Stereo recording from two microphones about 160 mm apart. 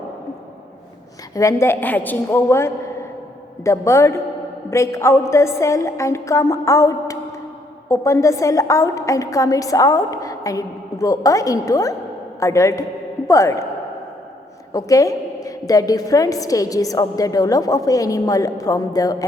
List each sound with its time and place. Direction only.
1.4 s a woman's voice: 20° left (ahead or behind)
14.7 s a woman's voice: 20° left (ahead or behind)